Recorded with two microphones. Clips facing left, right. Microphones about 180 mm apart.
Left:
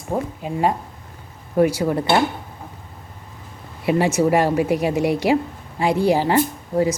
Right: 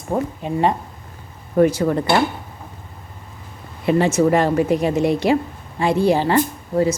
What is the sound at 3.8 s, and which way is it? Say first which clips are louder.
Cutlery: right 2 dB; 10° left (ahead or behind).